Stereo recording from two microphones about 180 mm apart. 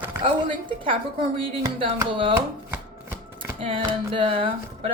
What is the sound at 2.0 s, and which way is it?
Speech, 25° right (ahead or behind).